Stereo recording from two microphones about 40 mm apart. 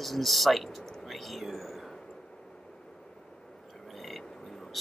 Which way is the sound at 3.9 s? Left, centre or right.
Centre.